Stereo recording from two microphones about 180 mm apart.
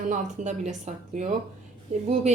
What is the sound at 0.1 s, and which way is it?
Speech, 45° right (ahead or behind).